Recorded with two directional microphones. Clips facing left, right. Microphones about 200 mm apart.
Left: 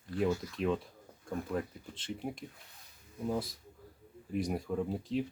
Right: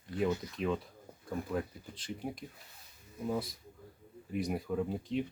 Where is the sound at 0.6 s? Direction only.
Centre (ahead or behind).